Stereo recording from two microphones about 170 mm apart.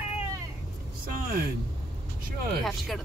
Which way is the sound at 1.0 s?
55° right (ahead or behind).